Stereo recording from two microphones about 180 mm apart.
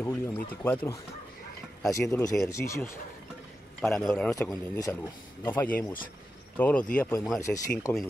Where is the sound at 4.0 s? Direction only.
5° left (ahead or behind).